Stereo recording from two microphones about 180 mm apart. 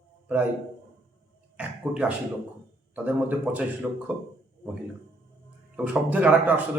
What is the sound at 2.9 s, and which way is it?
A man's voice, 10° right (ahead or behind).